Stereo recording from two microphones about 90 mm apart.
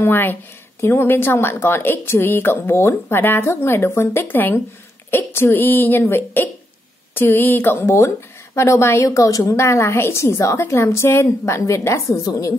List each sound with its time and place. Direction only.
0.0 s a woman's voice: 25° left (ahead or behind); by 12.5 s 40° left (ahead or behind)